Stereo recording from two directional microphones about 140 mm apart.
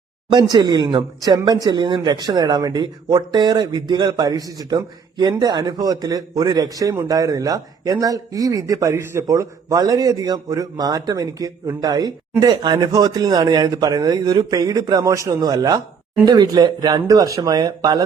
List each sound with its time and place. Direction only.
0.5 s speech: 30° right (ahead or behind)